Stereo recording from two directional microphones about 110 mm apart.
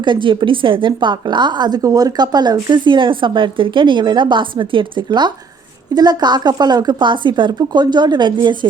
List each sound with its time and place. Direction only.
0.0 s a woman's voice: 50° right (ahead or behind)